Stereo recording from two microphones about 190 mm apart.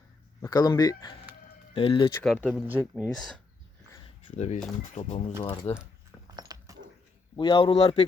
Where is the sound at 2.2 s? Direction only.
5° left (ahead or behind).